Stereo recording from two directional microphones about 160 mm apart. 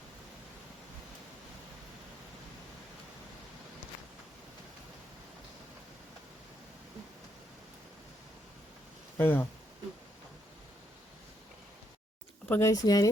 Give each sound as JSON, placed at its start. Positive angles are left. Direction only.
{"t": 9.1, "sound": "speech", "side_deg": 15}
{"t": 12.5, "sound": "speech", "side_deg": 15}